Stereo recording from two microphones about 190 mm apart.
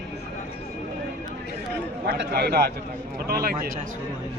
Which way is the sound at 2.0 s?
60° right (ahead or behind).